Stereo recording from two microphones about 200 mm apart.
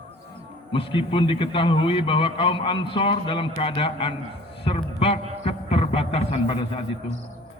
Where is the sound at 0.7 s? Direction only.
25° left (ahead or behind).